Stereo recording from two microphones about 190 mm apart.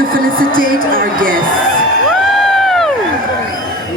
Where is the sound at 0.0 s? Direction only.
50° right (ahead or behind).